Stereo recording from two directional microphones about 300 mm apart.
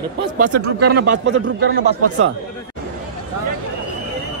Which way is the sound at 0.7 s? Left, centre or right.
Right.